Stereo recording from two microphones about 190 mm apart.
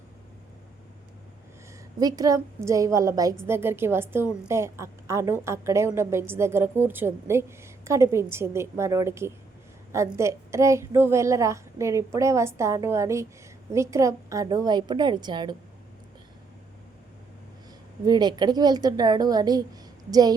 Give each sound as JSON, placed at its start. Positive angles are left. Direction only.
{"t": 2.0, "sound": "a woman's voice", "side_deg": -20}
{"t": 18.0, "sound": "a woman's voice", "side_deg": -20}